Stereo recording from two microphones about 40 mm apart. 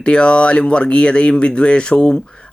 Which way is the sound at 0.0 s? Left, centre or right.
Left.